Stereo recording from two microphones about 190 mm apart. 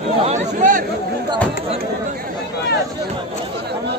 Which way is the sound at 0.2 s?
40° right (ahead or behind).